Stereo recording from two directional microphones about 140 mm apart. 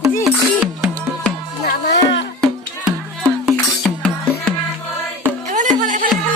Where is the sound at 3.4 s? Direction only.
5° left (ahead or behind).